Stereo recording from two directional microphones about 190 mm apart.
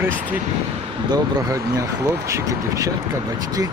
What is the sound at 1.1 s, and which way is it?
Speech, 20° right (ahead or behind).